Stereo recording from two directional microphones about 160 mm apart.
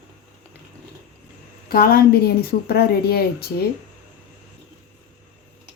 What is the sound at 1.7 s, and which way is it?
A woman's voice, 70° left (ahead or behind).